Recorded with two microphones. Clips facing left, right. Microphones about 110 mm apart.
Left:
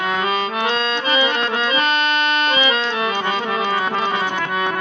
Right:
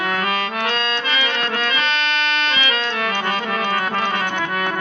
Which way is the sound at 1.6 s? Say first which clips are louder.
Left 3 dB; 45° left (ahead or behind).